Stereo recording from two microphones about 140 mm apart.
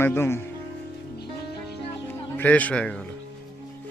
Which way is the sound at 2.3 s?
10° left (ahead or behind).